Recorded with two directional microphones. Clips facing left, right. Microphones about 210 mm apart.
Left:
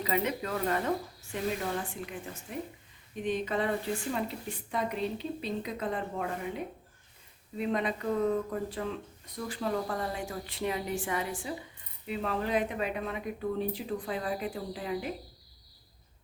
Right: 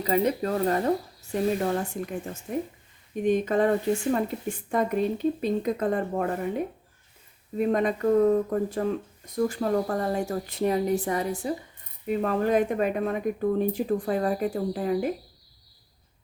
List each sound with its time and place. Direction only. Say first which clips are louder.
0.0 s speech: right 7 dB; 40° right (ahead or behind)